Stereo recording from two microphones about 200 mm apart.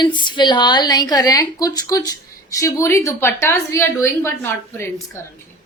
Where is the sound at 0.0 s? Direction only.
25° left (ahead or behind).